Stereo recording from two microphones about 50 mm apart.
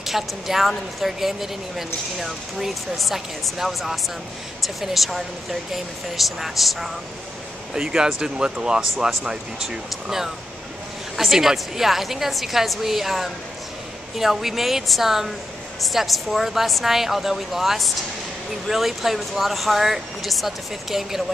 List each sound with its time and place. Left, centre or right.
0.0 s speech: centre
7.7 s speech: centre